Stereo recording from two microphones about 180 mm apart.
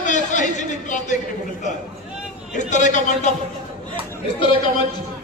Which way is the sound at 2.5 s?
40° left (ahead or behind).